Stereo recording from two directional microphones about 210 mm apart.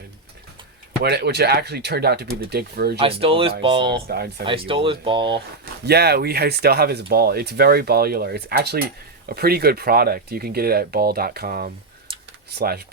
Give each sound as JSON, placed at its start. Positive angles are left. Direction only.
{"t": 1.0, "sound": "speech", "side_deg": -50}
{"t": 3.0, "sound": "speech", "side_deg": -25}
{"t": 4.0, "sound": "speech", "side_deg": -50}
{"t": 4.4, "sound": "speech", "side_deg": -25}
{"t": 5.8, "sound": "speech", "side_deg": -50}